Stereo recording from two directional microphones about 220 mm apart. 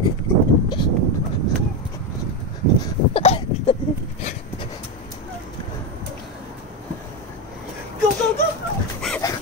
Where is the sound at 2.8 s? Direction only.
25° left (ahead or behind).